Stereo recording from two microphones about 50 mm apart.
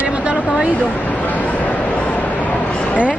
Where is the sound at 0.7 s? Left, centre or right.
Left.